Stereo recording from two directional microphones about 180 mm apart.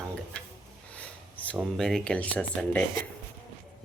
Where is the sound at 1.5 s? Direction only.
Centre (ahead or behind).